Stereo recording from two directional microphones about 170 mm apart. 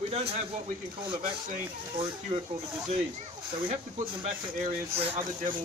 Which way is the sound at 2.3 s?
30° right (ahead or behind).